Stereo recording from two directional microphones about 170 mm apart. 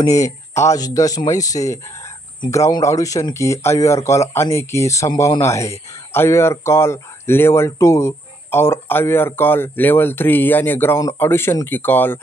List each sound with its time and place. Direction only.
0.6 s speech: 20° left (ahead or behind)